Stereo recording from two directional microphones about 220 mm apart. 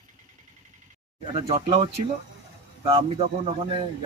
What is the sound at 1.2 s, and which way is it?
Speech, 25° right (ahead or behind).